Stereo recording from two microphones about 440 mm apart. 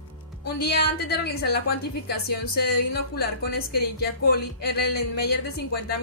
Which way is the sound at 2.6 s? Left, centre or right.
Left.